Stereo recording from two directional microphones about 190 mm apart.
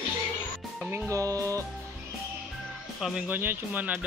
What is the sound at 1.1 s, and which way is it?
Speech, 15° right (ahead or behind).